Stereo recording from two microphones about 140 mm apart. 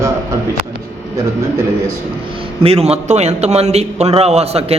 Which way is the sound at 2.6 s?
45° right (ahead or behind).